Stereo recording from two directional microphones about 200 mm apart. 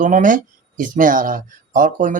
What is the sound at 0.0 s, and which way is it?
Speech, 40° right (ahead or behind).